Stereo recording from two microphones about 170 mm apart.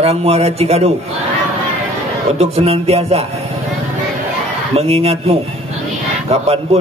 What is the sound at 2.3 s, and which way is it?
Speech, 35° right (ahead or behind).